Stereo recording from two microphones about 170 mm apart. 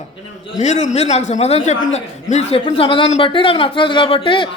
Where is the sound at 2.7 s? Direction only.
30° left (ahead or behind).